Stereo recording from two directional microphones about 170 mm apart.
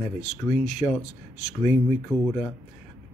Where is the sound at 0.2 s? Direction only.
40° left (ahead or behind).